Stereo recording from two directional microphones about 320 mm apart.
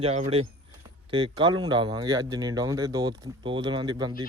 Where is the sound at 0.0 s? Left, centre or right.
Centre.